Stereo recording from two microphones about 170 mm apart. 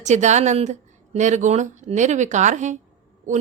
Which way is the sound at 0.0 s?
45° right (ahead or behind).